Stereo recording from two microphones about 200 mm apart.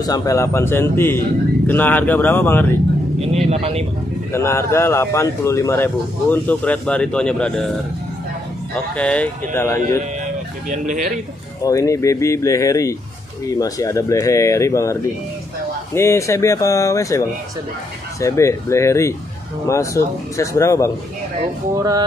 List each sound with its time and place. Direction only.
0.0 s speech: 15° left (ahead or behind)
3.2 s vehicle: 30° right (ahead or behind)
4.3 s speech: 15° left (ahead or behind)
8.9 s speech: 5° left (ahead or behind)
10.2 s music: 40° right (ahead or behind)
11.6 s speech: 15° left (ahead or behind)
18.2 s speech: 15° left (ahead or behind)
21.7 s a sound: 15° right (ahead or behind)